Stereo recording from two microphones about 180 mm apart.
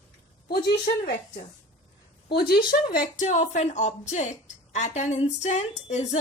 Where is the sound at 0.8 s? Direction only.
55° left (ahead or behind).